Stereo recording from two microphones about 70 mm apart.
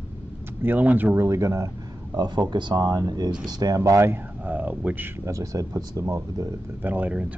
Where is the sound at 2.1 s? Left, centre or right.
Right.